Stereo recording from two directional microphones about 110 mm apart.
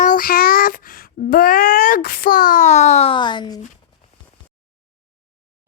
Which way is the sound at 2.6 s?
90° left.